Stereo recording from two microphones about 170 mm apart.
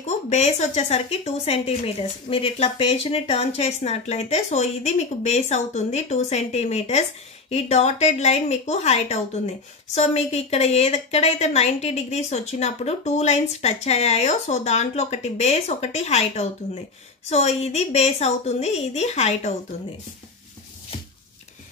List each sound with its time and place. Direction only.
0.0 s speech: 40° left (ahead or behind)